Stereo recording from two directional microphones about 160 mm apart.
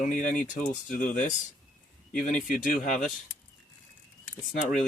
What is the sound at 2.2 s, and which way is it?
Speech, 55° left (ahead or behind).